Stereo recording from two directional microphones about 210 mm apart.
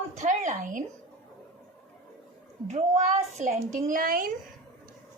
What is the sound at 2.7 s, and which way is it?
A woman's voice, 35° right (ahead or behind).